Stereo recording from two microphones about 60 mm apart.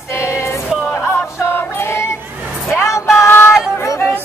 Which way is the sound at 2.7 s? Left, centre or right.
Left.